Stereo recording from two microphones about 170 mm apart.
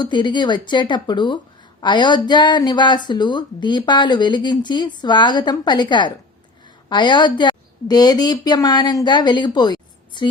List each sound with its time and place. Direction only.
0.0 s a woman's voice: 25° left (ahead or behind)